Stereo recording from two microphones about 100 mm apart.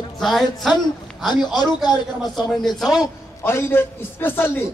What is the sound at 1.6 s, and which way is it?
Speech, 45° left (ahead or behind).